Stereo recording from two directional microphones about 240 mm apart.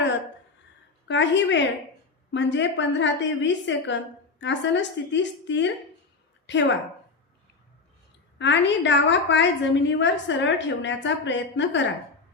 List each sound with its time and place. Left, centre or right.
1.0 s a woman's voice: left
8.4 s a woman's voice: left